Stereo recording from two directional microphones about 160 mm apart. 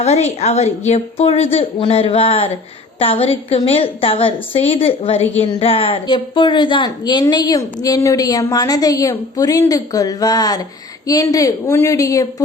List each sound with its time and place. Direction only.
0.0 s a woman's voice: 40° left (ahead or behind); by 12.3 s 20° left (ahead or behind)